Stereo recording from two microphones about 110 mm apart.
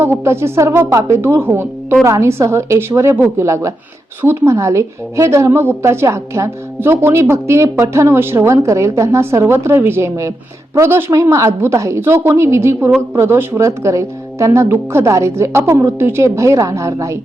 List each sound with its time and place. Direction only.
0.0 s a woman's voice: 20° right (ahead or behind)